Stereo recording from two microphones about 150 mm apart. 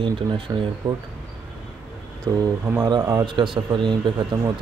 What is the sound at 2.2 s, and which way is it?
Speech, 20° right (ahead or behind).